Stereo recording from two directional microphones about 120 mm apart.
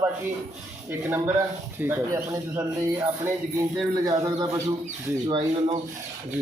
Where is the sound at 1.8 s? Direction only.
15° right (ahead or behind).